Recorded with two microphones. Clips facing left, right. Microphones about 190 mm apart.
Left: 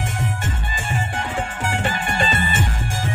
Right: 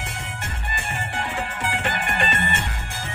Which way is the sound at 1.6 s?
45° left (ahead or behind).